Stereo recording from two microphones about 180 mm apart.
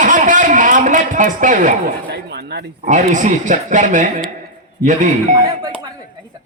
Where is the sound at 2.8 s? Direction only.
45° right (ahead or behind).